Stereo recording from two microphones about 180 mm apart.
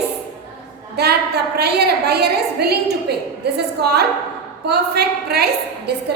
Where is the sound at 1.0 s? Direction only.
65° right (ahead or behind).